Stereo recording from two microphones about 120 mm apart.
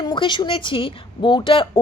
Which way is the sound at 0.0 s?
40° left (ahead or behind).